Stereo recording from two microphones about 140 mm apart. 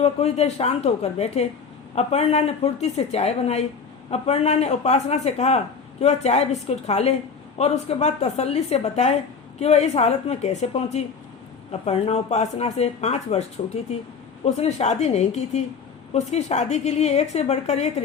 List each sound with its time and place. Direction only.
0.0 s speech: 50° left (ahead or behind)
14.4 s speech: 50° left (ahead or behind)